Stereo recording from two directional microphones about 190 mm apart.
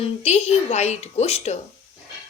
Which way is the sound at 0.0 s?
35° left (ahead or behind).